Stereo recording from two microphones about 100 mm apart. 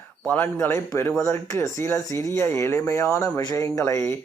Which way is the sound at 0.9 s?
25° left (ahead or behind).